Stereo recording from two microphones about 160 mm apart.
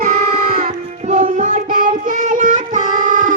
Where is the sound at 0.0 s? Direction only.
60° right (ahead or behind).